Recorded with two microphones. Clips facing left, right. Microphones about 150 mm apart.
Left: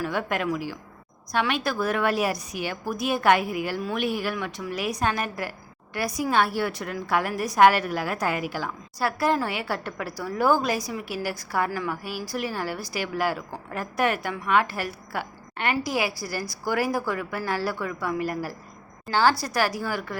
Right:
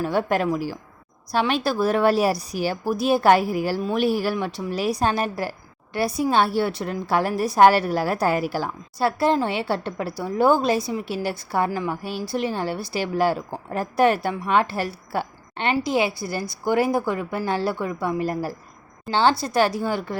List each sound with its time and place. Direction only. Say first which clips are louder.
0.0 s a woman's voice: right 5 dB; 35° right (ahead or behind)